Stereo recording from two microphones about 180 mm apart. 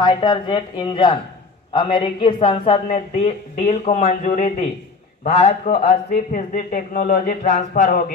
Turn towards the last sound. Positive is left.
turn(degrees=40)  # may be behind; listen again after turning